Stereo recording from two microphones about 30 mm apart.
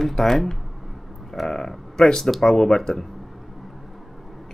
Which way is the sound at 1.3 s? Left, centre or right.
Centre.